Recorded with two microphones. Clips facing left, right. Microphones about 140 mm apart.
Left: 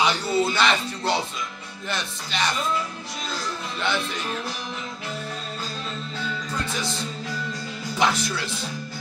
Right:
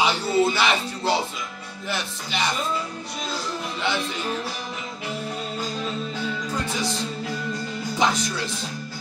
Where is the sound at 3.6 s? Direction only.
15° right (ahead or behind).